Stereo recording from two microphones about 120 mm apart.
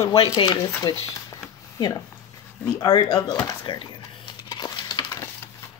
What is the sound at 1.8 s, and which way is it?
Speech, 35° left (ahead or behind).